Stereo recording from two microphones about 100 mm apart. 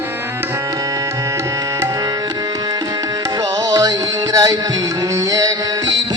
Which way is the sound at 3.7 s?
35° right (ahead or behind).